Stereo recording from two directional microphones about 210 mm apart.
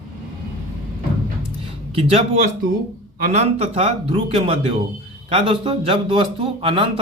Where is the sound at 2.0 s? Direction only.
30° right (ahead or behind).